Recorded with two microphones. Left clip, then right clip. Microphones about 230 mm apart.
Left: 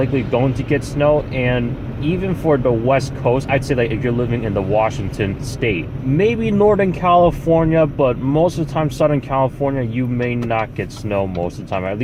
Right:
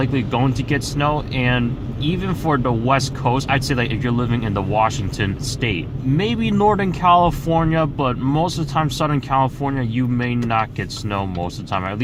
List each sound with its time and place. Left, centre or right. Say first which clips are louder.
0.0 s speech: left 3 dB; right